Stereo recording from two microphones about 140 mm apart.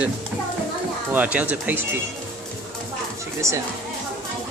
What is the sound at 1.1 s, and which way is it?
Speech, 10° right (ahead or behind).